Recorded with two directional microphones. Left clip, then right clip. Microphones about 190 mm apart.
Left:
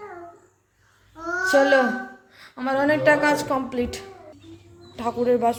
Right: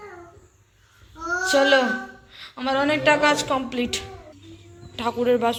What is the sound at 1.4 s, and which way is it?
A child's voice, 15° left (ahead or behind).